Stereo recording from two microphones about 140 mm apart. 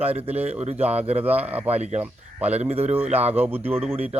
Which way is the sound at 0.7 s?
10° right (ahead or behind).